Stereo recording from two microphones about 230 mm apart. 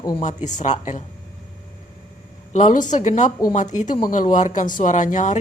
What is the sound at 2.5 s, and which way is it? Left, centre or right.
A woman's voice, left.